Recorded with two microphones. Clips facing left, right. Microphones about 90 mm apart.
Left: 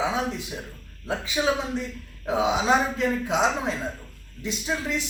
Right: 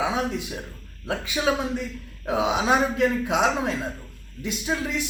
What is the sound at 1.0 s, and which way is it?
A man's voice, 5° right (ahead or behind).